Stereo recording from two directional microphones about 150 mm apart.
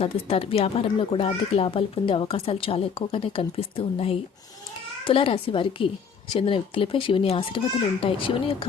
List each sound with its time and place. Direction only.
0.0 s a child's voice: 40° left (ahead or behind)